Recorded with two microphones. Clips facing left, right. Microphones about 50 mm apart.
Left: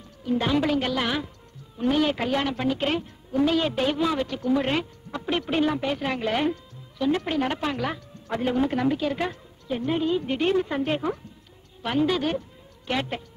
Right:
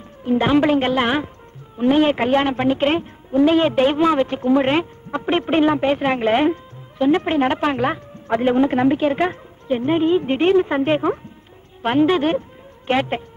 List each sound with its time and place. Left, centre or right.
0.2 s a woman's voice: right